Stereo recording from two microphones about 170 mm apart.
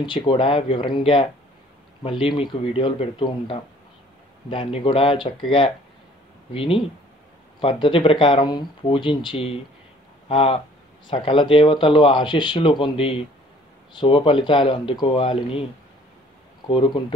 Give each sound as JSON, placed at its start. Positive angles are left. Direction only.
{"t": 0.0, "sound": "speech", "side_deg": 30}
{"t": 16.6, "sound": "speech", "side_deg": 30}